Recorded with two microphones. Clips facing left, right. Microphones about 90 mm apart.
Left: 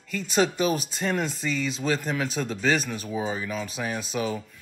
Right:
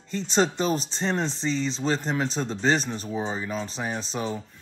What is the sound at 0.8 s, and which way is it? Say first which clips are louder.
Speech: even; 30° right (ahead or behind).